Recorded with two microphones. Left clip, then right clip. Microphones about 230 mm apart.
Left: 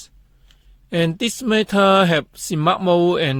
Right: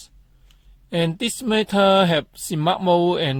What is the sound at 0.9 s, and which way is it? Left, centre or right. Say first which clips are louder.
Speech: left 2 dB; left.